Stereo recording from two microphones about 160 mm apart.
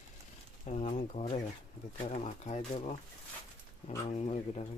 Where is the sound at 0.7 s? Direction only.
45° left (ahead or behind).